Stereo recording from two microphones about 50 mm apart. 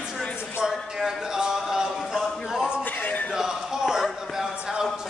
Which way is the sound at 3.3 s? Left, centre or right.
Centre.